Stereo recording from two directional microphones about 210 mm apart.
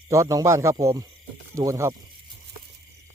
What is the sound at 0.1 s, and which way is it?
Speech, 15° right (ahead or behind).